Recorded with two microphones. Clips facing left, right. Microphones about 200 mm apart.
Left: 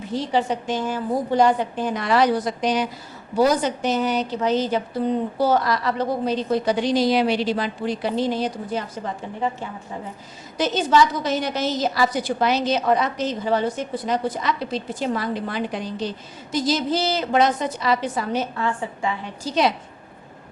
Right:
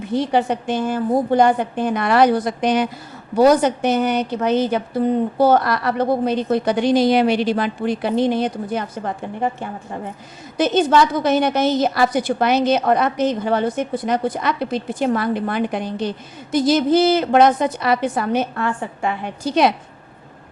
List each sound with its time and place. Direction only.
0.0 s a woman's voice: 60° right (ahead or behind)